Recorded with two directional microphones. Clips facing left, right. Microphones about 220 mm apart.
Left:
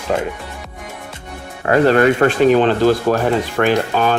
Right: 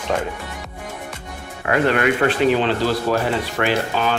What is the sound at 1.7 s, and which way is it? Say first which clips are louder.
Speech: left 6 dB; 35° left (ahead or behind).